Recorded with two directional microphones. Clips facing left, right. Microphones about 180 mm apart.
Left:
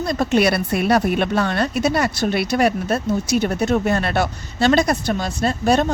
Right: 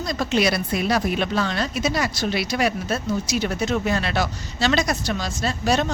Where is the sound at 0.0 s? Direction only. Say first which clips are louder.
Left 4 dB; 55° left (ahead or behind).